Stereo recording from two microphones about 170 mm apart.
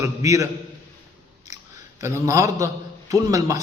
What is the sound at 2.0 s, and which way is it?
A man's voice, 15° right (ahead or behind).